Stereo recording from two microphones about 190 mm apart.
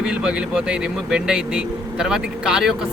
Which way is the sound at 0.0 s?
5° right (ahead or behind).